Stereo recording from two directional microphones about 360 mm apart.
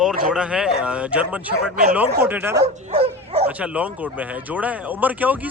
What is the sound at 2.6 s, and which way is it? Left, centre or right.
Dog, centre.